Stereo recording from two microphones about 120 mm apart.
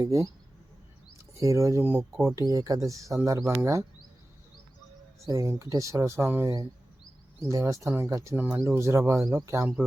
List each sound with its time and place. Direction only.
0.0 s speech: 25° right (ahead or behind)
1.3 s speech: 25° right (ahead or behind)
5.2 s speech: 25° right (ahead or behind)